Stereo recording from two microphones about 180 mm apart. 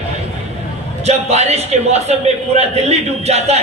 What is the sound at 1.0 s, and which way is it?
A man's voice, 35° right (ahead or behind).